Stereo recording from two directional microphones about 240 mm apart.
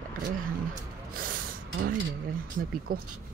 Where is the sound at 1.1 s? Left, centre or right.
Right.